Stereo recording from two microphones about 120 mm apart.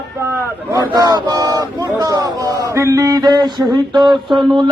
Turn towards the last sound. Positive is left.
turn(degrees=-40)  # may be behind; listen again after turning